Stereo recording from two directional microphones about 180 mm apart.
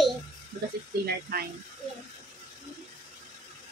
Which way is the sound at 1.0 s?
60° right (ahead or behind).